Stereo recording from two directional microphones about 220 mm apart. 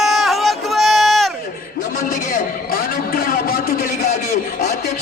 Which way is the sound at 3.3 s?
45° left (ahead or behind).